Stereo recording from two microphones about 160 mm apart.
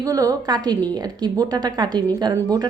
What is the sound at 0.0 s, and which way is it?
Speech, 20° right (ahead or behind).